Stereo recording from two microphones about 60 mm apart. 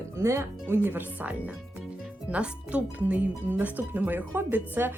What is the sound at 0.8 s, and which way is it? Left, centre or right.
Speech, right.